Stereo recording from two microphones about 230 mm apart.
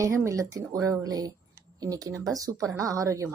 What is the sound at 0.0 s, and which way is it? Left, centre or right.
A woman's voice, centre.